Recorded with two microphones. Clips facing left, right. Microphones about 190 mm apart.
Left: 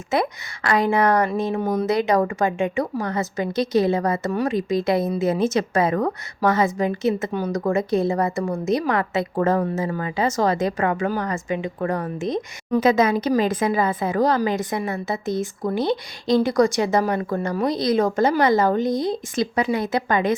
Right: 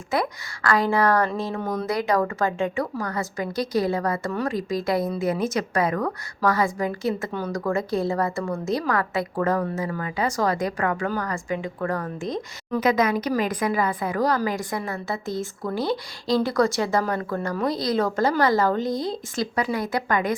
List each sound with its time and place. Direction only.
0.1 s speech: 20° left (ahead or behind)